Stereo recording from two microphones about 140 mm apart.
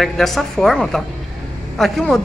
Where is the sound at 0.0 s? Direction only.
Centre (ahead or behind).